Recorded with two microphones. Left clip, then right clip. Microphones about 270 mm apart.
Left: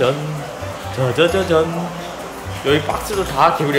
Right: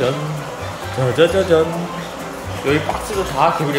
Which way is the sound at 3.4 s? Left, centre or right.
Centre.